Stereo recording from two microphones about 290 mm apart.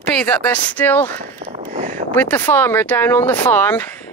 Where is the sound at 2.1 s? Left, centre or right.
Centre.